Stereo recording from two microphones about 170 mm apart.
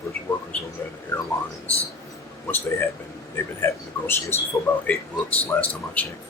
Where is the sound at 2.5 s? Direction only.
15° left (ahead or behind).